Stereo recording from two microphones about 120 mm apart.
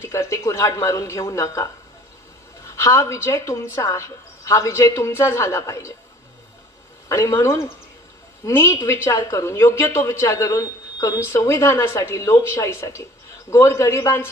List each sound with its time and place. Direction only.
0.0 s a woman's voice: 25° left (ahead or behind)
7.1 s a woman's voice: 25° left (ahead or behind)